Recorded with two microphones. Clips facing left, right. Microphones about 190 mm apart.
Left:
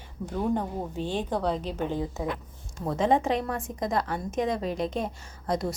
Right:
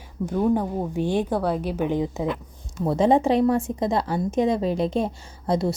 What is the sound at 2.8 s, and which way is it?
A woman's voice, 30° right (ahead or behind).